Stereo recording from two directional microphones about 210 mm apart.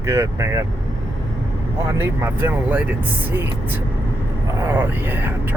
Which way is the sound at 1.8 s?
10° right (ahead or behind).